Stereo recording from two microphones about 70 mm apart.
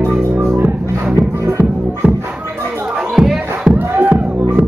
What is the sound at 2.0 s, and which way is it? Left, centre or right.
Music, right.